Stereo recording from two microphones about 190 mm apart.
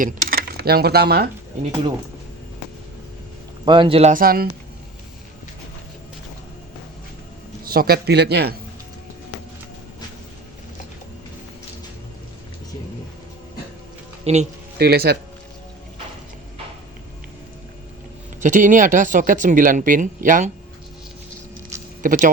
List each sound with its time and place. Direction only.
0.0 s speech: 50° right (ahead or behind)
3.7 s a man's voice: 25° right (ahead or behind)
4.1 s speech: 50° right (ahead or behind)
7.6 s speech: 50° right (ahead or behind)
14.3 s speech: 35° right (ahead or behind)
14.8 s speech: 55° right (ahead or behind)
18.3 s speech: 40° right (ahead or behind)
22.0 s speech: 45° right (ahead or behind)